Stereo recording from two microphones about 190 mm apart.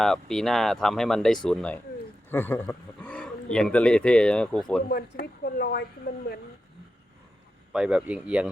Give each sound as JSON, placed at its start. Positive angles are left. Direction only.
{"t": 0.0, "sound": "speech", "side_deg": 0}
{"t": 4.9, "sound": "speech", "side_deg": 55}
{"t": 7.7, "sound": "speech", "side_deg": -5}